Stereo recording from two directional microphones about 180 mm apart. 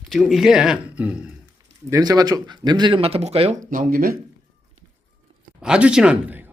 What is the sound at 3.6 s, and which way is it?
Speech, 50° right (ahead or behind).